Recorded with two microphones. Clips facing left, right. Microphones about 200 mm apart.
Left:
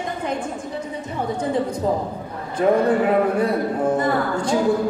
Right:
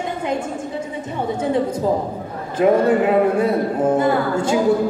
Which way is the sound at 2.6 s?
15° right (ahead or behind).